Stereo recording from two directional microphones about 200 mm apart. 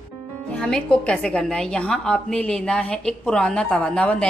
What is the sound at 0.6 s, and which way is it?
A woman's voice, 5° left (ahead or behind).